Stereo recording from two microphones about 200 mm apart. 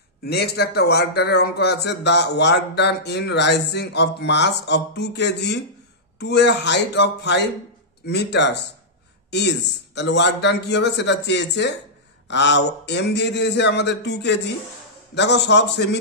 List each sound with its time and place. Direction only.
0.2 s speech: 55° left (ahead or behind)